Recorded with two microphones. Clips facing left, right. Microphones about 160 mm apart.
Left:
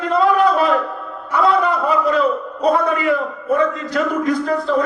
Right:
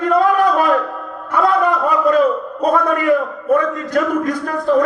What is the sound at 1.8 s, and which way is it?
A man's voice, 45° right (ahead or behind).